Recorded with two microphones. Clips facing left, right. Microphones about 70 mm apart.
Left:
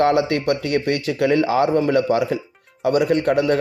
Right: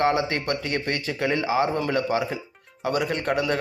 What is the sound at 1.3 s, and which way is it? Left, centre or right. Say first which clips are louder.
A man's voice: left 6 dB; left.